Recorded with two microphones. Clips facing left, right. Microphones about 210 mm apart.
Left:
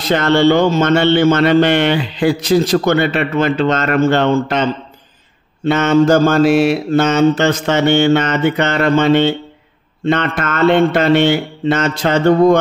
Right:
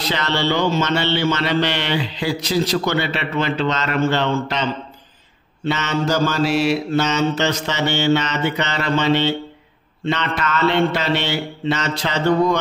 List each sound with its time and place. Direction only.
0.0 s speech: 50° left (ahead or behind)
5.7 s speech: 50° left (ahead or behind)